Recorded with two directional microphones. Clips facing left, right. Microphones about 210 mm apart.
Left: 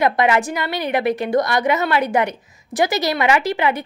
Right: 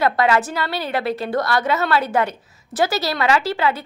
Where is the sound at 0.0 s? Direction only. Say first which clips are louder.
Left 1 dB; 15° left (ahead or behind).